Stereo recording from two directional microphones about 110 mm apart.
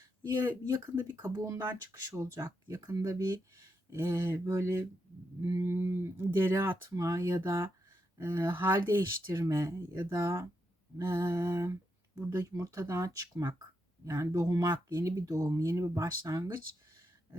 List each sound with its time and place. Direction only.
0.4 s speech: 25° right (ahead or behind)